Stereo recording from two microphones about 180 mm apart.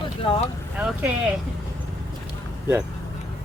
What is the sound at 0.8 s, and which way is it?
Speech, 10° right (ahead or behind).